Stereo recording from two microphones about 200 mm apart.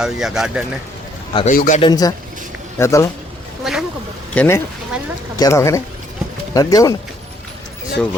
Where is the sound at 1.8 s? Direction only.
20° left (ahead or behind).